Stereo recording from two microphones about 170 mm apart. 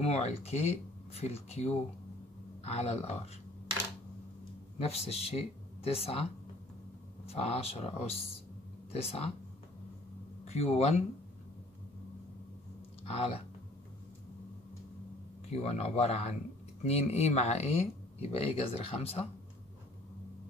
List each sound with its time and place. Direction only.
0.0 s speech: 40° left (ahead or behind)
4.7 s speech: 35° left (ahead or behind)
7.2 s speech: 35° left (ahead or behind)
10.4 s speech: 40° left (ahead or behind)
13.0 s speech: 35° left (ahead or behind)
15.5 s speech: 35° left (ahead or behind)